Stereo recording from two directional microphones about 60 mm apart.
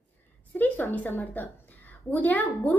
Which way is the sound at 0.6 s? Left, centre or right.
Left.